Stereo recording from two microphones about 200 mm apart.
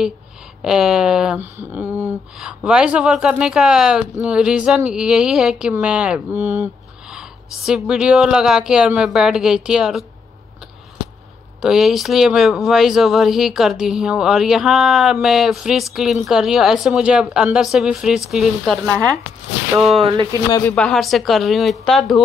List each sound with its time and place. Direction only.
0.6 s speech: centre (ahead or behind)
11.6 s speech: centre (ahead or behind)
19.9 s speech: 25° right (ahead or behind)
20.5 s speech: 5° left (ahead or behind)